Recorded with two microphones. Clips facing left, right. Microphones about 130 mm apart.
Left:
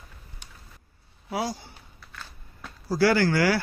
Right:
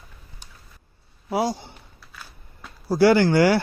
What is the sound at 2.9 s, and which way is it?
Speech, 20° right (ahead or behind).